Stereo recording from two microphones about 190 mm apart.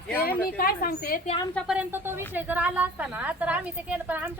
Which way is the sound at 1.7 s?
10° right (ahead or behind).